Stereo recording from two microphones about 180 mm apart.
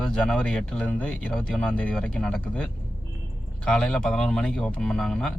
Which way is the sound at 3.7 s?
5° left (ahead or behind).